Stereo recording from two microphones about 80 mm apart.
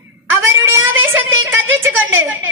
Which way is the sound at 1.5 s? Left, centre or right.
Right.